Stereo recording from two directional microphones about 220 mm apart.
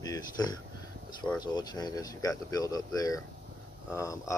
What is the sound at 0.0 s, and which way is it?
Speech, 15° left (ahead or behind).